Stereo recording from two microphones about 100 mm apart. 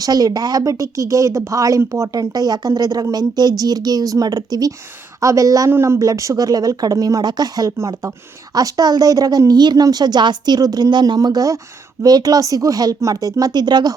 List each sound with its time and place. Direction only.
0.0 s speech: 40° right (ahead or behind)